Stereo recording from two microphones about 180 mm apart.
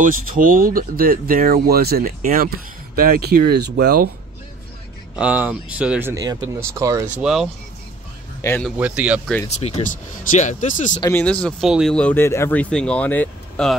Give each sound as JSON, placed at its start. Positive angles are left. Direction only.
{"t": 0.0, "sound": "speech", "side_deg": -50}
{"t": 5.1, "sound": "speech", "side_deg": -5}
{"t": 7.2, "sound": "speech", "side_deg": -5}
{"t": 8.4, "sound": "speech", "side_deg": 15}
{"t": 8.7, "sound": "speech", "side_deg": -5}
{"t": 9.5, "sound": "speech", "side_deg": 35}
{"t": 11.0, "sound": "speech", "side_deg": 15}